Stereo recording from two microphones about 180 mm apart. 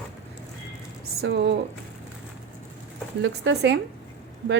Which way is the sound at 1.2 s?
75° right (ahead or behind).